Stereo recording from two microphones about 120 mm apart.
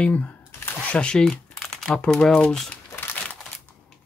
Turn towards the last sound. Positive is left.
turn(degrees=20)  # may be behind; listen again after turning